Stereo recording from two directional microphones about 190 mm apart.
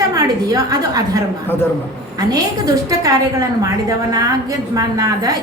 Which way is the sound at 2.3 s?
20° right (ahead or behind).